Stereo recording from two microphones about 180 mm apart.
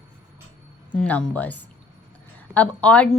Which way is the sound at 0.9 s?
5° left (ahead or behind).